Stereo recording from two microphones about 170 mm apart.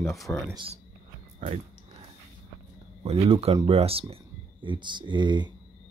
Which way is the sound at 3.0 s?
35° right (ahead or behind).